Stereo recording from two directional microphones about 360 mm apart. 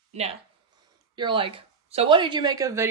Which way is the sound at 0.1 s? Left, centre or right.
Centre.